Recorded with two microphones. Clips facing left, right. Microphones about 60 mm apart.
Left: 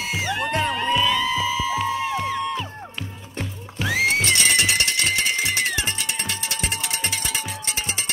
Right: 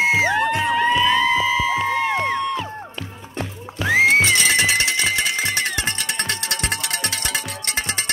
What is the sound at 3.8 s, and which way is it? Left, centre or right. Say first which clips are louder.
Music: right 6 dB; right.